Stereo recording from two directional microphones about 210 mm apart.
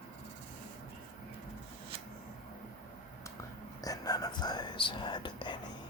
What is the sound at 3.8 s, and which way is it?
Speech, 15° left (ahead or behind).